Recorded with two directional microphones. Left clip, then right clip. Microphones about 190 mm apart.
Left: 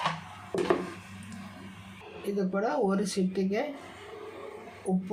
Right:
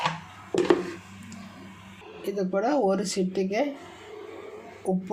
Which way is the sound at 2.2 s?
35° right (ahead or behind).